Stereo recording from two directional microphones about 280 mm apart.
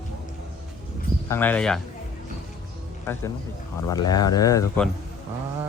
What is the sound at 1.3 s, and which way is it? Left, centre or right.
Speech, centre.